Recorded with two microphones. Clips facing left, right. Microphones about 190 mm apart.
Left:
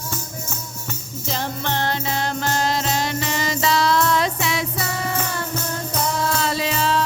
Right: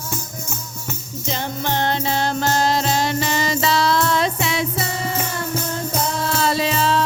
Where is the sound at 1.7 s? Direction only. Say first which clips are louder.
Right 4 dB; 20° right (ahead or behind).